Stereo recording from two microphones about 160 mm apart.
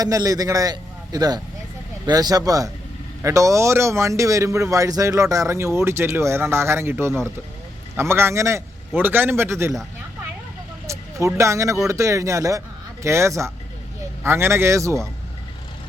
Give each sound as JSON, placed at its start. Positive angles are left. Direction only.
{"t": 0.0, "sound": "a man's voice", "side_deg": -25}
{"t": 10.9, "sound": "a sound", "side_deg": -15}
{"t": 11.3, "sound": "a man's voice", "side_deg": -20}